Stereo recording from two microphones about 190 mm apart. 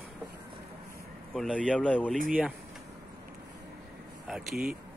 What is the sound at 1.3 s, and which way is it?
Speech, 5° left (ahead or behind).